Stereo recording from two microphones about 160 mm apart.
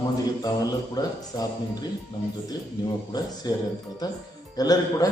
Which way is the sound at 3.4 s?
25° left (ahead or behind).